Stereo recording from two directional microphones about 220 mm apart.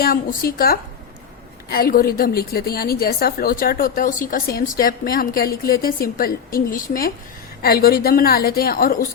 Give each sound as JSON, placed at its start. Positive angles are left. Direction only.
{"t": 0.0, "sound": "a woman's voice", "side_deg": 45}